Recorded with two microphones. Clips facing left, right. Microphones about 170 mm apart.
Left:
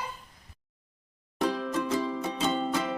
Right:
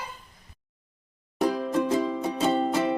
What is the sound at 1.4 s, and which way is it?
Music, 15° right (ahead or behind).